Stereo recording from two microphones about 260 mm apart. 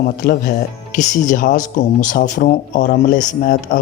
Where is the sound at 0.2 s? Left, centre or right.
Left.